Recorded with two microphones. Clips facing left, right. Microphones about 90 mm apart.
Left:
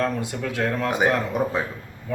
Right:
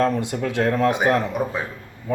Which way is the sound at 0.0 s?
25° right (ahead or behind).